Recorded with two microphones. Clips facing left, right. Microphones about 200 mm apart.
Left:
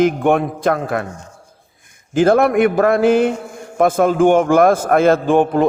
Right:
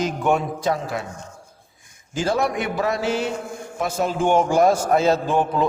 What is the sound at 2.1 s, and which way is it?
A man's voice, 55° left (ahead or behind).